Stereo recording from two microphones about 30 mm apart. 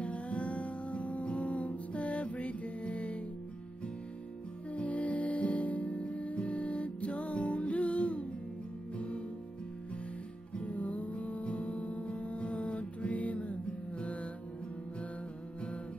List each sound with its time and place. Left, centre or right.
0.0 s music: left
4.7 s music: left
10.5 s music: left